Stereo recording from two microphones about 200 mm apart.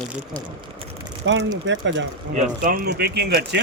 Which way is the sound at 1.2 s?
65° right (ahead or behind).